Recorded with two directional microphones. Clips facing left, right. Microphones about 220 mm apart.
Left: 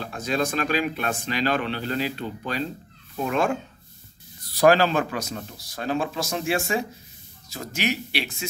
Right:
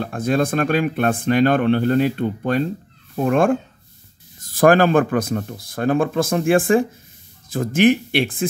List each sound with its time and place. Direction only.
0.0 s speech: 55° right (ahead or behind)